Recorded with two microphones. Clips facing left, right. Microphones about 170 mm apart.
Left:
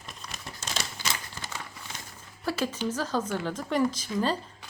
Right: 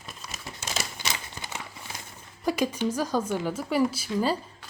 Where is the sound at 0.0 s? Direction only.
5° right (ahead or behind).